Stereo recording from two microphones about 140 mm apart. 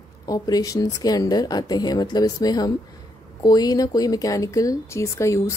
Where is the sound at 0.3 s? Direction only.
25° left (ahead or behind).